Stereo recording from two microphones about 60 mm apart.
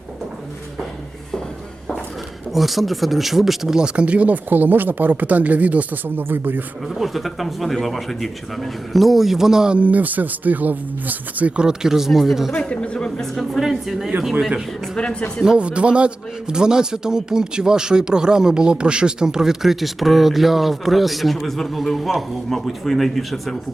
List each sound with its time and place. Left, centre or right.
2.5 s speech: centre; by 6.6 s right
6.8 s speech: centre
9.7 s speech: right; by 12.5 s centre
12.5 s a sound: left
13.1 s speech: centre
15.4 s a man's voice: centre